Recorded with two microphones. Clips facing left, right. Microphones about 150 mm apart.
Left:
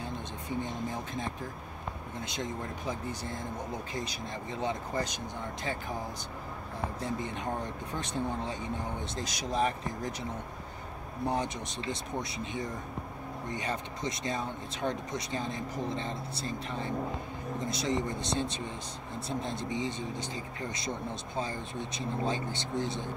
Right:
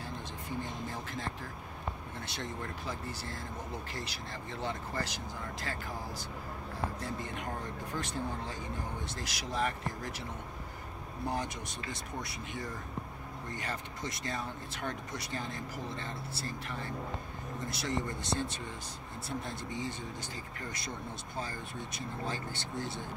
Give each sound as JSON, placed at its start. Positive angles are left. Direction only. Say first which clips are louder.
{"t": 2.2, "sound": "speech", "louder": "left 4 dB", "side_deg": 15}
{"t": 7.0, "sound": "speech", "louder": "left 4 dB", "side_deg": 20}
{"t": 11.2, "sound": "speech", "louder": "left 4 dB", "side_deg": 25}
{"t": 21.4, "sound": "speech", "louder": "left 5 dB", "side_deg": 20}